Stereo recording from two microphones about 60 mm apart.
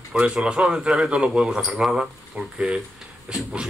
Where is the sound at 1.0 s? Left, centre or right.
Centre.